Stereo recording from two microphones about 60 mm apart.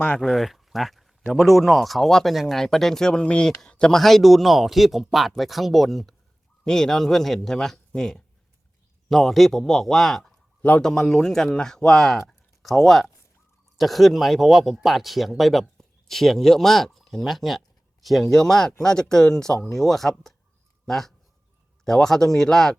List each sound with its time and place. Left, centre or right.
0.2 s speech: centre
4.0 s speech: centre
10.6 s speech: left
10.8 s speech: centre
12.3 s a sound: centre
13.7 s a man's voice: centre